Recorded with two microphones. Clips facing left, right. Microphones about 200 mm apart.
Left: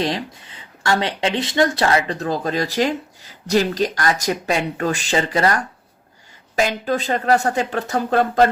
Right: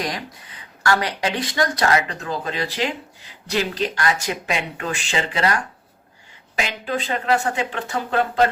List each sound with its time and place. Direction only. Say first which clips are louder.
0.0 s speech: left 5 dB; 25° left (ahead or behind)
6.6 s speech: left 5 dB; 40° left (ahead or behind)